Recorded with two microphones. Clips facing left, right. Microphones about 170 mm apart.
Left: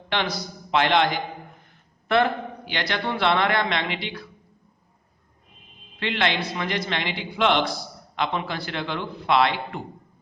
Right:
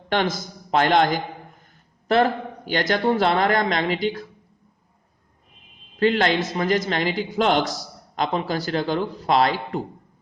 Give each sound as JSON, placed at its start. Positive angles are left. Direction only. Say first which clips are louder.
{"t": 0.1, "sound": "a man's voice", "louder": "right 4 dB", "side_deg": -45}
{"t": 6.0, "sound": "a man's voice", "louder": "right 6 dB", "side_deg": -40}